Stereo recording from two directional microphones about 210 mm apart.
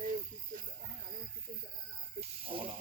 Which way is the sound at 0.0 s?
40° right (ahead or behind).